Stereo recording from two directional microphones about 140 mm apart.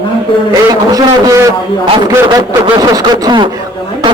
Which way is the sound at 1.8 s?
35° right (ahead or behind).